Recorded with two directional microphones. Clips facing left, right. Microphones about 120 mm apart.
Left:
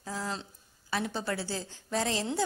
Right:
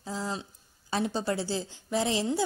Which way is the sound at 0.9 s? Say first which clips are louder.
Right 4 dB; 25° right (ahead or behind).